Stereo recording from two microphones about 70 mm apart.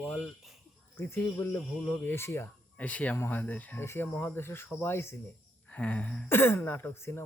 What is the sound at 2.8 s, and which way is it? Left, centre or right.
Speech, left.